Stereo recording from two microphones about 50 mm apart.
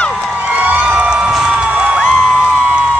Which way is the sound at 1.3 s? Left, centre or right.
Centre.